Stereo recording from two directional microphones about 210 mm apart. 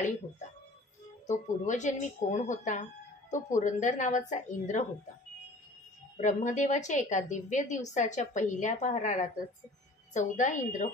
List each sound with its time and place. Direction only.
1.2 s speech: 35° left (ahead or behind)
6.1 s speech: 35° left (ahead or behind)